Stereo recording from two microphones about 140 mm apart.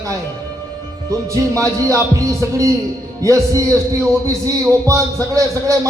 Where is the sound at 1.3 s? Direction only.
25° right (ahead or behind).